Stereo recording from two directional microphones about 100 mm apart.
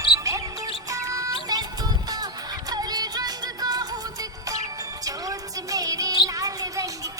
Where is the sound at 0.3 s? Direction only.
30° right (ahead or behind).